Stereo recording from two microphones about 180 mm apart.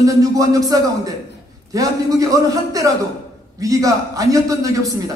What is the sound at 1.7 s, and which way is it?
A man's voice, 20° right (ahead or behind).